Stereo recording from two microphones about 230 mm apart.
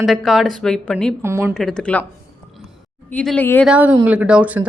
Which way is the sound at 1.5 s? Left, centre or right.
Centre.